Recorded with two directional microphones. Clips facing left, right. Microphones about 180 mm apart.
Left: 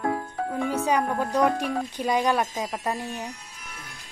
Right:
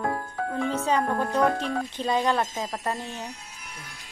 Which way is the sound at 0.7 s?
15° left (ahead or behind).